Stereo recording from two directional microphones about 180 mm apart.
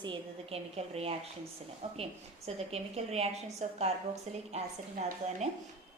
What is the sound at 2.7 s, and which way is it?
A woman's voice, 35° right (ahead or behind).